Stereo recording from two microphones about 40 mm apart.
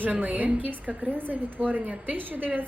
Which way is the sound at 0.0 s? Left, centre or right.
Right.